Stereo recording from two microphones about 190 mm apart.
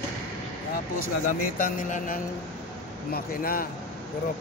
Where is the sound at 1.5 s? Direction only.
45° left (ahead or behind).